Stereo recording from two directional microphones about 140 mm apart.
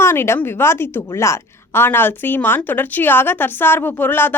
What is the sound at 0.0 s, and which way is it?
A woman's voice, 15° left (ahead or behind).